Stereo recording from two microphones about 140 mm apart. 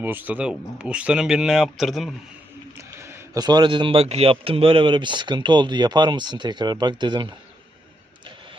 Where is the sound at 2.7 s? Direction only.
20° right (ahead or behind).